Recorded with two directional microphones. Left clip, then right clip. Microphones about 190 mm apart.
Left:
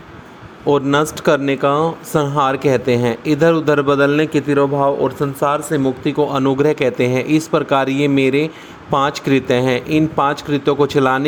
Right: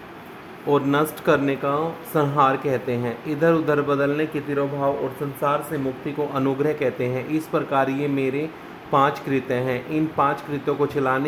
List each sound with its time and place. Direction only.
0.7 s speech: 35° left (ahead or behind)